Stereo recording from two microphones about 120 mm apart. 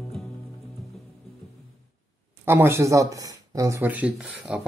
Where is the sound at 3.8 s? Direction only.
15° right (ahead or behind).